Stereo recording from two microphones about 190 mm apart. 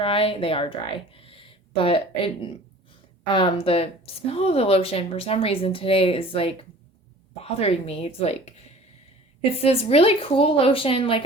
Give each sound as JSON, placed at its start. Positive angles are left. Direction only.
{"t": 0.0, "sound": "a woman's voice", "side_deg": 30}